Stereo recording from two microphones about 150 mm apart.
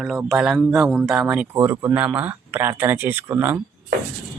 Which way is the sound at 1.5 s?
15° right (ahead or behind).